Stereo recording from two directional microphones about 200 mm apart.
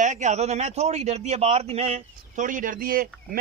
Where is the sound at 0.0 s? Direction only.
35° right (ahead or behind).